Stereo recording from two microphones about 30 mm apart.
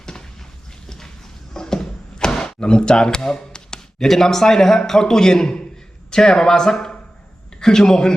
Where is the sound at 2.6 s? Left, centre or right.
Left.